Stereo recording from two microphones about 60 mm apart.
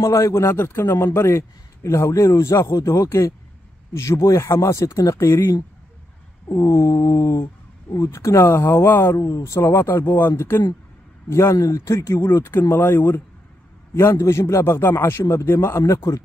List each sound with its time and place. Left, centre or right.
0.0 s speech: left
0.5 s speech: left
8.6 s speech: left
9.1 s speech: left
11.5 s speech: left
13.9 s speech: left